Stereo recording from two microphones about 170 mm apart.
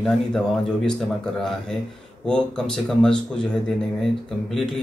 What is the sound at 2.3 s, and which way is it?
Speech, 5° left (ahead or behind).